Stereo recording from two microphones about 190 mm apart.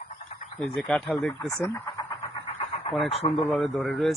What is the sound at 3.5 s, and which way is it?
Speech, centre (ahead or behind).